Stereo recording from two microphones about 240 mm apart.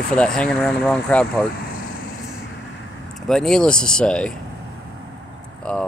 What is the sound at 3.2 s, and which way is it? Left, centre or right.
Speech, centre.